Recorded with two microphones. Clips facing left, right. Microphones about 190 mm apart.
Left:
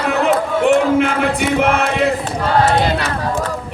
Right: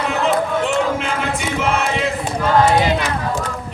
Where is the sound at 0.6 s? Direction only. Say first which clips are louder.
Left 6 dB; 60° left (ahead or behind).